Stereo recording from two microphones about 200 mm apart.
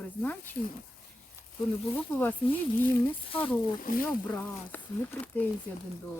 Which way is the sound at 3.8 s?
45° left (ahead or behind).